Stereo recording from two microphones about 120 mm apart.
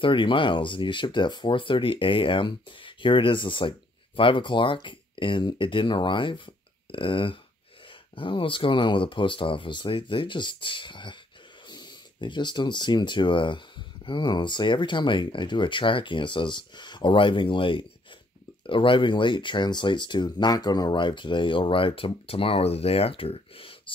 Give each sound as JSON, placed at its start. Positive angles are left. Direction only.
{"t": 0.0, "sound": "speech", "side_deg": 45}